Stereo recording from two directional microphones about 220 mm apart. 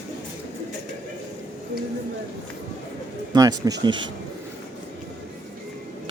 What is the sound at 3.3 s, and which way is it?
Speech, 15° right (ahead or behind).